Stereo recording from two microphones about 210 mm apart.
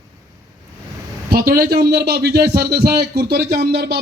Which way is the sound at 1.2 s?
45° right (ahead or behind).